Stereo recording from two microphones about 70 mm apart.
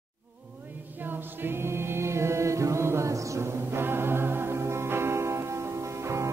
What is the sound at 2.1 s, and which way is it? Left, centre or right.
A capella, right.